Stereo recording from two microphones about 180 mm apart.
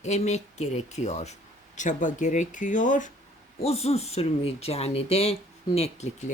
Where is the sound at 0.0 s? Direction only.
40° left (ahead or behind).